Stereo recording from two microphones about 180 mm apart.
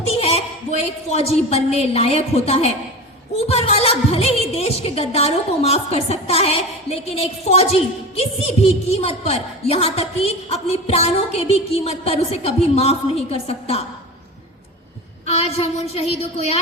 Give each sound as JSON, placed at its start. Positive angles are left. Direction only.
{"t": 0.1, "sound": "a sound", "side_deg": 35}
{"t": 1.1, "sound": "a woman's voice", "side_deg": 35}
{"t": 15.3, "sound": "a woman's voice", "side_deg": 35}